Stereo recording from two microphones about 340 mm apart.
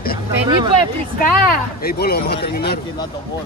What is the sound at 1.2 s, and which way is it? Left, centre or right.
Speech, left.